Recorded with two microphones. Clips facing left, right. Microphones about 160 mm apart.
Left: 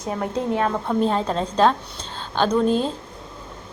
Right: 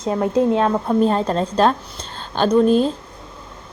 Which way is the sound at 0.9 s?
10° right (ahead or behind).